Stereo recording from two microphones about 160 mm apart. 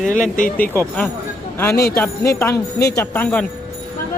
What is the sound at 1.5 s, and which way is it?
Speech, 15° left (ahead or behind).